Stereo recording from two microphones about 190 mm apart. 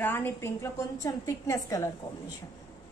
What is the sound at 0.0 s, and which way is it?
A woman's voice, 10° left (ahead or behind).